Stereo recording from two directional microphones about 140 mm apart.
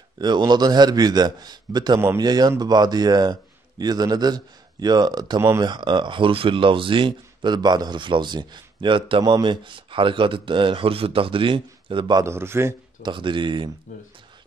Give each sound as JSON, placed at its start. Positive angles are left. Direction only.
{"t": 0.2, "sound": "a man's voice", "side_deg": -30}
{"t": 2.0, "sound": "a man's voice", "side_deg": -15}
{"t": 2.2, "sound": "a man's voice", "side_deg": -30}
{"t": 12.2, "sound": "a man's voice", "side_deg": -20}
{"t": 13.0, "sound": "speech", "side_deg": -35}